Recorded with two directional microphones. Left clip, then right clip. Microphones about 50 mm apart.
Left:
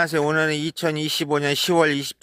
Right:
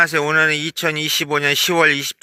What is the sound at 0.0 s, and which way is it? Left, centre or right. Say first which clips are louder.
Speech: right 5 dB; left.